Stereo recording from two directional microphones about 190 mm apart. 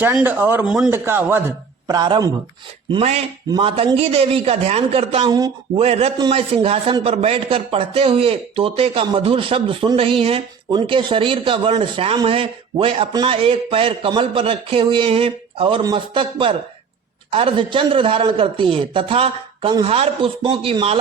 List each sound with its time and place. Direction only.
0.0 s a man's voice: 10° right (ahead or behind)
2.9 s a man's voice: 35° right (ahead or behind)